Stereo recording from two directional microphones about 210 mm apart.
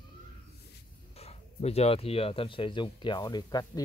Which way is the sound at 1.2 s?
30° left (ahead or behind).